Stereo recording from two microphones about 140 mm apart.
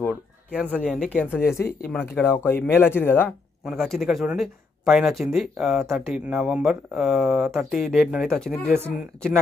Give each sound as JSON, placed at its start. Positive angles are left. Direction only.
{"t": 0.7, "sound": "speech", "side_deg": 10}
{"t": 1.9, "sound": "speech", "side_deg": 0}
{"t": 2.2, "sound": "speech", "side_deg": 15}
{"t": 3.6, "sound": "speech", "side_deg": 0}
{"t": 8.6, "sound": "speech", "side_deg": -15}